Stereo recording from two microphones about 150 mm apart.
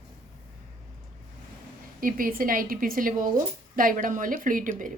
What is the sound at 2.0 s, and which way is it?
A woman's voice, 70° right (ahead or behind).